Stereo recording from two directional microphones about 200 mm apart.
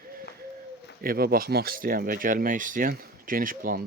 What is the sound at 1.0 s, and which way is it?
Speech, 50° right (ahead or behind).